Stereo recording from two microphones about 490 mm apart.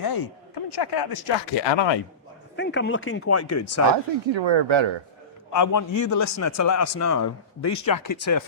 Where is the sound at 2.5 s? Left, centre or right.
Left.